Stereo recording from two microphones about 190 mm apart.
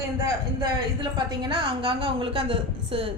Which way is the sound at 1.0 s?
25° right (ahead or behind).